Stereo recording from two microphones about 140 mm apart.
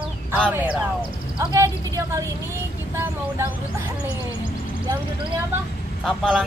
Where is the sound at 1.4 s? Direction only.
25° right (ahead or behind).